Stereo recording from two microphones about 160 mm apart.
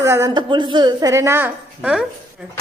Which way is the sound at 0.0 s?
20° right (ahead or behind).